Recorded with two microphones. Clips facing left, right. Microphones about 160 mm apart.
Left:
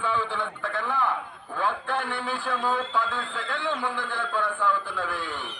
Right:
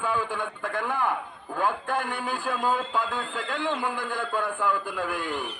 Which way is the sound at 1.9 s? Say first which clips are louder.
Even; 45° right (ahead or behind).